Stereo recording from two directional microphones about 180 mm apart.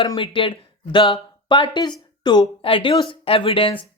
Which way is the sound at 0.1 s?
30° left (ahead or behind).